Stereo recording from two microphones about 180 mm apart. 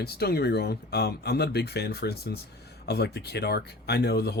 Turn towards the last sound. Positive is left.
turn(degrees=60)  # may be behind; listen again after turning